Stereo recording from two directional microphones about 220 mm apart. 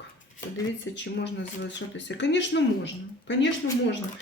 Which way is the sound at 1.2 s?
55° left (ahead or behind).